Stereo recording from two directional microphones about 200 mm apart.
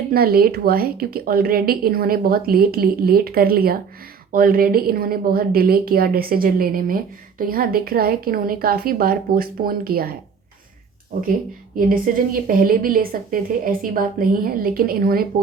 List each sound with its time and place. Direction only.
0.1 s a woman's voice: 50° right (ahead or behind)
11.9 s a woman's voice: 45° right (ahead or behind)